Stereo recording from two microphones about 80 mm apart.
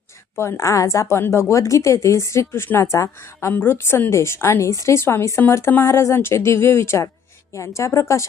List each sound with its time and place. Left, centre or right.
0.3 s a woman's voice: left